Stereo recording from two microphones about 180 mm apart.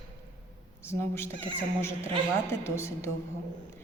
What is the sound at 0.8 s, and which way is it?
Speech, 15° left (ahead or behind).